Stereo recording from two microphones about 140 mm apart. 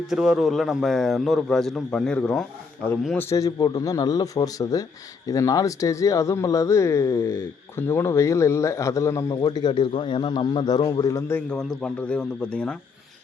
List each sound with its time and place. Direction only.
0.1 s a man's voice: 5° right (ahead or behind)
3.2 s speech: 20° left (ahead or behind)
11.4 s speech: 5° left (ahead or behind)